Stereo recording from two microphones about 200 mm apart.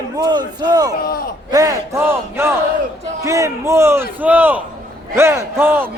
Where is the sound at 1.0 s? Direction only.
50° left (ahead or behind).